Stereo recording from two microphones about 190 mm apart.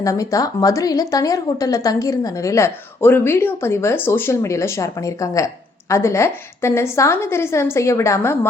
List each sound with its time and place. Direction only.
0.0 s a woman's voice: 15° left (ahead or behind)